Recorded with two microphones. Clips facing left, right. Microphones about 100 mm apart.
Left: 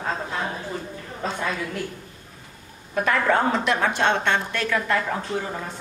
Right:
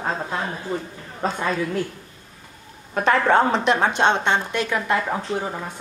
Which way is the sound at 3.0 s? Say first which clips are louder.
Right 4 dB; 25° right (ahead or behind).